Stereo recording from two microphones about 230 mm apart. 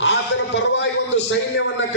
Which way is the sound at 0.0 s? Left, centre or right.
Left.